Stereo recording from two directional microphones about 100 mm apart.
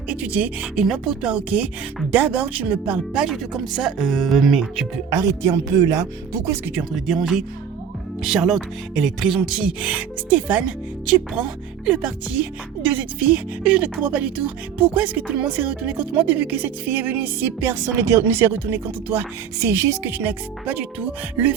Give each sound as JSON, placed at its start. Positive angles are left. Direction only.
{"t": 0.1, "sound": "speech", "side_deg": -15}
{"t": 5.1, "sound": "speech", "side_deg": -35}
{"t": 6.9, "sound": "speech", "side_deg": -5}